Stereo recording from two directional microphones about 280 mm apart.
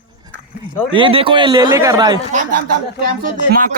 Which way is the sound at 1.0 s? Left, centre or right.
Centre.